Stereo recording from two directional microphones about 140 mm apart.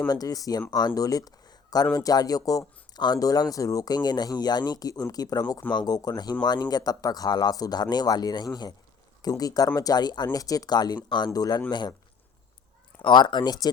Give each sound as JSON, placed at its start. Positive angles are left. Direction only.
{"t": 0.1, "sound": "speech", "side_deg": 25}
{"t": 13.0, "sound": "speech", "side_deg": 35}